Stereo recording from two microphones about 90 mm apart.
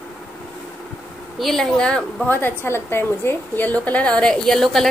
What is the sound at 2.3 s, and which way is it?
A woman's voice, 25° left (ahead or behind).